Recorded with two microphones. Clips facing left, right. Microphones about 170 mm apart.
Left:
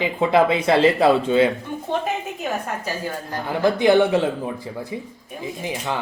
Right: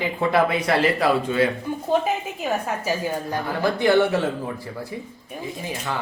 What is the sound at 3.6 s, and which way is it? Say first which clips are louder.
Speech: left 3 dB; 20° left (ahead or behind).